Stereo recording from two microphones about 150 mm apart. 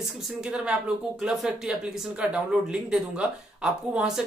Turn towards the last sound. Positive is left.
turn(degrees=-5)  # may be behind; listen again after turning